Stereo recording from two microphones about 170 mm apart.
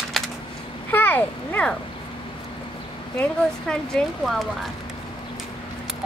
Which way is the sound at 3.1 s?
5° left (ahead or behind).